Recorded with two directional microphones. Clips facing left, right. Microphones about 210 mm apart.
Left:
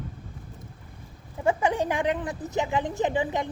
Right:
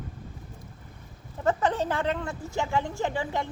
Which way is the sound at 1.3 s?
10° left (ahead or behind).